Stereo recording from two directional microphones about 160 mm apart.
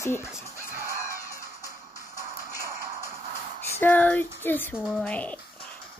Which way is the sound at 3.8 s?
10° left (ahead or behind).